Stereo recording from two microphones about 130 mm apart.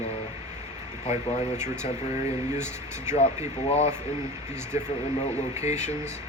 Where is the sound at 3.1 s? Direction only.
60° left (ahead or behind).